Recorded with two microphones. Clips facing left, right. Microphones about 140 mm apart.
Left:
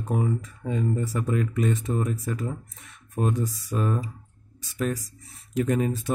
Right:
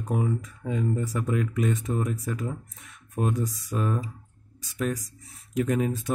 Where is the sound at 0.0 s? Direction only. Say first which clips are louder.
Left 1 dB; centre (ahead or behind).